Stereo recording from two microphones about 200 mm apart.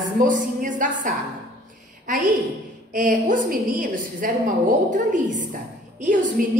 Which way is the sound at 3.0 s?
40° right (ahead or behind).